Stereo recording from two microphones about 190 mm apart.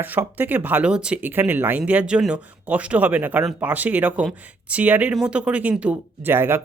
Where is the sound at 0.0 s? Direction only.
10° right (ahead or behind).